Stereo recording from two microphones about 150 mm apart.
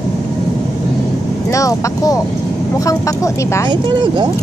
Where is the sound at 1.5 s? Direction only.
20° left (ahead or behind).